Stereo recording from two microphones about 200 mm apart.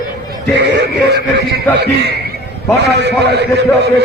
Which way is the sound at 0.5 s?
60° right (ahead or behind).